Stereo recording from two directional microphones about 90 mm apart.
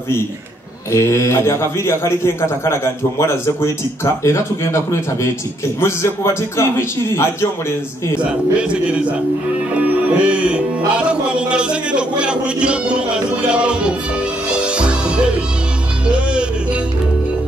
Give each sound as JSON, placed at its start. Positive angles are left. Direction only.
{"t": 0.9, "sound": "a man's voice", "side_deg": 30}
{"t": 9.8, "sound": "music", "side_deg": -15}
{"t": 11.0, "sound": "a man's voice", "side_deg": -10}
{"t": 14.6, "sound": "music", "side_deg": -10}